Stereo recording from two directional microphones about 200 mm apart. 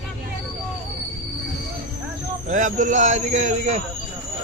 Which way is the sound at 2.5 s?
40° right (ahead or behind).